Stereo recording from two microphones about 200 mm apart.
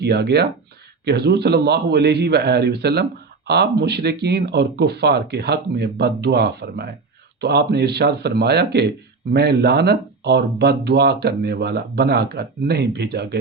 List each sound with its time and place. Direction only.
0.0 s a man's voice: 55° right (ahead or behind)